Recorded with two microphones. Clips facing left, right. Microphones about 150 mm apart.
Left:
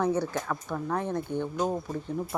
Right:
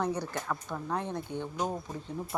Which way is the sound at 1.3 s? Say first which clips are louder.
Left 7 dB; 45° left (ahead or behind).